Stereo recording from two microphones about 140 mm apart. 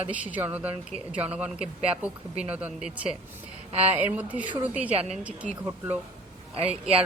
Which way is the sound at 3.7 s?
45° right (ahead or behind).